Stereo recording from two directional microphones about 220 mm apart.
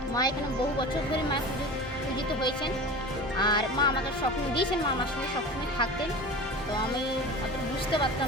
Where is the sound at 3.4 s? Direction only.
20° left (ahead or behind).